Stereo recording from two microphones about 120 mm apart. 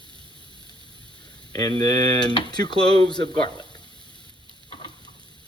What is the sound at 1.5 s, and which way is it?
Stir, 30° left (ahead or behind).